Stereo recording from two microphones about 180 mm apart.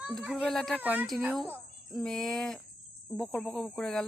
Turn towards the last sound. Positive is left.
turn(degrees=5)  # may be behind; listen again after turning